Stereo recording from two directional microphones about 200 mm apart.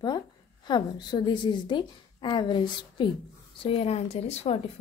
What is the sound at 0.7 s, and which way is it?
Speech, 20° left (ahead or behind).